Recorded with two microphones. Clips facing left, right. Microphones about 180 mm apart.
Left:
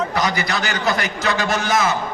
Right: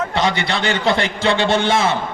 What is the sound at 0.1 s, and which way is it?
A man's voice, 25° right (ahead or behind).